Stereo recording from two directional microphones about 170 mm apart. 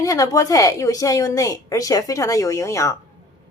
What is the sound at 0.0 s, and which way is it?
A woman's voice, 20° left (ahead or behind).